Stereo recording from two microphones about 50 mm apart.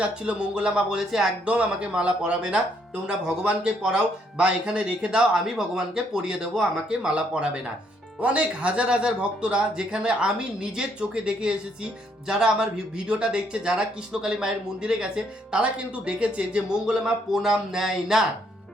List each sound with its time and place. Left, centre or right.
0.0 s speech: right
0.9 s a man's voice: centre
1.5 s a man's voice: right
17.3 s a man's voice: centre